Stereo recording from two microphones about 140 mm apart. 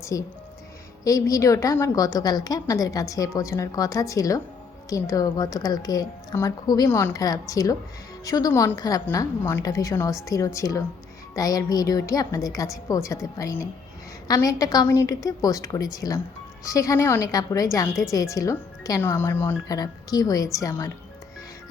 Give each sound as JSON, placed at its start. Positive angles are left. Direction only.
{"t": 0.0, "sound": "a woman's voice", "side_deg": 25}